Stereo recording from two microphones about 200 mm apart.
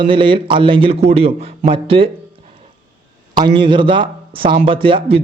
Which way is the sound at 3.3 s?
25° right (ahead or behind).